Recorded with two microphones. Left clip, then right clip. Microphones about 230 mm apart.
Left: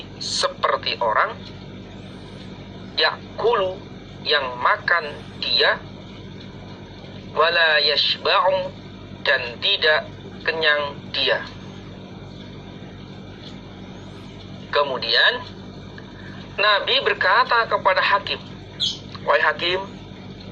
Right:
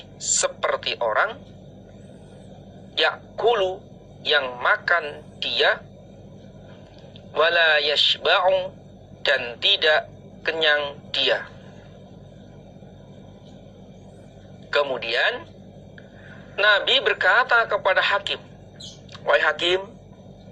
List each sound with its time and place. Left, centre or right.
0.6 s a man's voice: right
2.9 s a man's voice: right
7.3 s a man's voice: right
14.7 s speech: right
16.6 s a man's voice: right